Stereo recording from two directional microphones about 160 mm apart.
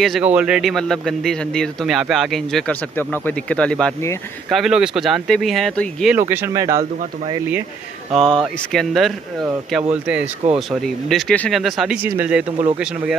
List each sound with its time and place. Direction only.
0.0 s a man's voice: 5° right (ahead or behind)
6.1 s speech: 15° right (ahead or behind)
8.1 s a man's voice: centre (ahead or behind)